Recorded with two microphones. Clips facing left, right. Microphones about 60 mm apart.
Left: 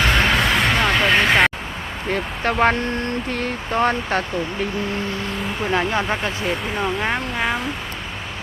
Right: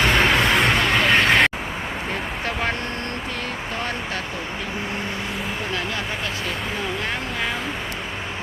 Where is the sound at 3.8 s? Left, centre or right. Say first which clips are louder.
Left 11 dB; left.